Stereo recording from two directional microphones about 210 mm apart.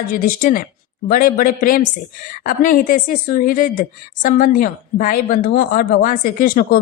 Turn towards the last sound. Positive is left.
turn(degrees=40)  # may be behind; listen again after turning